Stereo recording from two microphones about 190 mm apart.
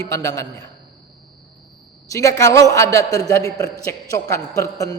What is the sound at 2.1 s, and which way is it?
A man's voice, 15° left (ahead or behind).